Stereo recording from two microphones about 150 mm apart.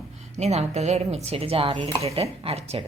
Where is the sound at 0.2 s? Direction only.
45° right (ahead or behind).